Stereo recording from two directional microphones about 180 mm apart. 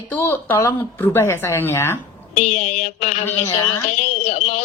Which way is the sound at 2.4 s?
35° left (ahead or behind).